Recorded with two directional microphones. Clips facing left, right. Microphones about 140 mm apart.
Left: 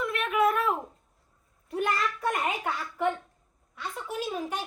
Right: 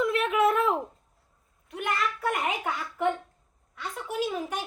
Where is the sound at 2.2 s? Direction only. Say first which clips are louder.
Even; 10° right (ahead or behind).